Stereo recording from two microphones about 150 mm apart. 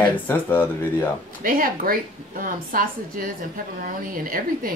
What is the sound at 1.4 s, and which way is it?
A woman's voice, 70° right (ahead or behind).